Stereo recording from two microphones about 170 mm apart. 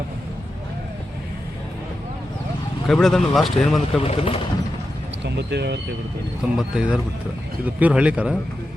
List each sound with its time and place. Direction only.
2.8 s speech: 5° left (ahead or behind)
4.0 s speech: 35° left (ahead or behind)
5.2 s speech: 85° right
6.6 s speech: centre (ahead or behind)